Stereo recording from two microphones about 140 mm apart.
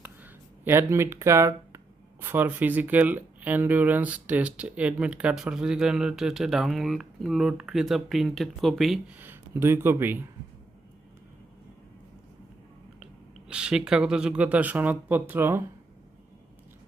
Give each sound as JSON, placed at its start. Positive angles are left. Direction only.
{"t": 0.0, "sound": "a sound", "side_deg": -15}
{"t": 2.2, "sound": "speech", "side_deg": -15}
{"t": 9.1, "sound": "speech", "side_deg": -15}
{"t": 13.5, "sound": "speech", "side_deg": -5}